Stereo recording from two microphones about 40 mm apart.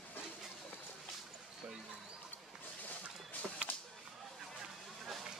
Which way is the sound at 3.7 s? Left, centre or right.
Left.